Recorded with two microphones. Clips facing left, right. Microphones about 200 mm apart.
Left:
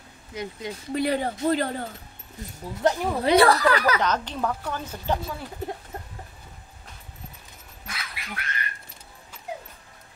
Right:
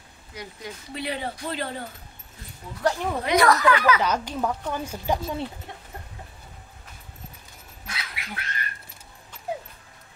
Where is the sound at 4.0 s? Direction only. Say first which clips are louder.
Even; 10° right (ahead or behind).